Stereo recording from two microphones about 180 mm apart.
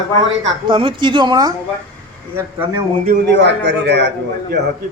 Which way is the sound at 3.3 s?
75° right (ahead or behind).